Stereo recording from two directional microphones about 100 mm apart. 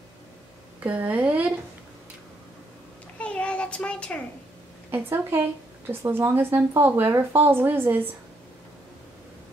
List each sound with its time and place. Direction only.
0.7 s a woman's voice: 15° right (ahead or behind)
3.2 s a sound: 10° left (ahead or behind)
4.9 s speech: 20° right (ahead or behind)